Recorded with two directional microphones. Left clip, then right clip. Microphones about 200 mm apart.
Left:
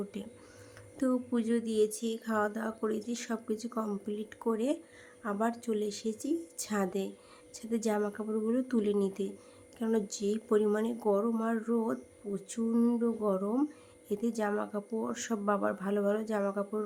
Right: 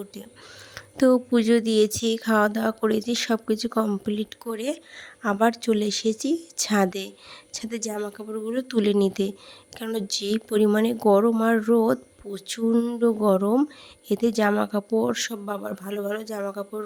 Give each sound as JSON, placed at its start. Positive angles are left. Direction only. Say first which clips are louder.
{"t": 0.9, "sound": "speech", "louder": "right 13 dB", "side_deg": -40}